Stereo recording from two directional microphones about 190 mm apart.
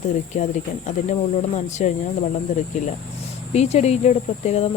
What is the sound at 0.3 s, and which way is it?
Speech, 40° left (ahead or behind).